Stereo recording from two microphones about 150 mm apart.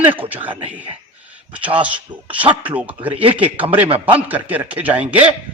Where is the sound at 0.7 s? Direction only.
10° right (ahead or behind).